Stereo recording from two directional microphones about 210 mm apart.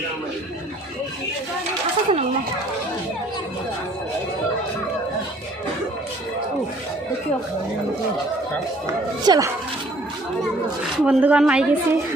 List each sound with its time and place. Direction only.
2.1 s speech: 30° right (ahead or behind)
9.2 s speech: 20° right (ahead or behind)
11.0 s a woman's voice: 5° right (ahead or behind)